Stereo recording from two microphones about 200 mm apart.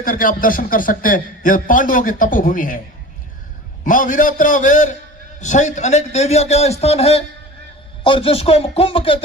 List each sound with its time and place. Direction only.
0.0 s a man's voice: 45° left (ahead or behind)
3.8 s a man's voice: 40° left (ahead or behind); by 9.2 s 25° left (ahead or behind)